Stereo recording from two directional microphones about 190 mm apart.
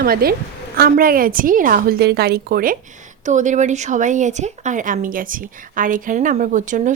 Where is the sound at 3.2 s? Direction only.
40° right (ahead or behind).